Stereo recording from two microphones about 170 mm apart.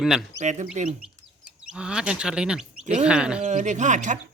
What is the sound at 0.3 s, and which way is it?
Speech, 45° right (ahead or behind).